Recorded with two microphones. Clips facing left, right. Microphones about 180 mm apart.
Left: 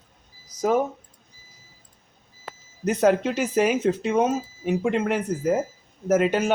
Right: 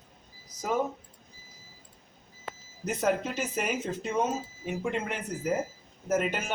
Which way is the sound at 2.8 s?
80° left.